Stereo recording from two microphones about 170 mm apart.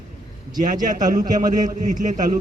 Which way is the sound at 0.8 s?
50° right (ahead or behind).